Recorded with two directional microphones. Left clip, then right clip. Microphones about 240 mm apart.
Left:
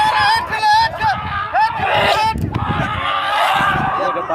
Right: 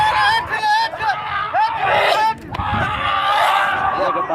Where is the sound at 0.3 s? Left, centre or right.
Left.